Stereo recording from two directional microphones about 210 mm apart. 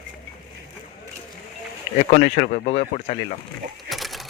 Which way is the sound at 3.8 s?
Centre (ahead or behind).